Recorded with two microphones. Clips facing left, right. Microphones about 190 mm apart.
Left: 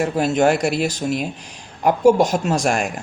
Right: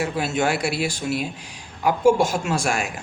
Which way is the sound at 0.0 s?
45° left (ahead or behind).